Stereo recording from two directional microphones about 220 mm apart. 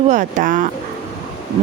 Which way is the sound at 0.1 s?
35° right (ahead or behind).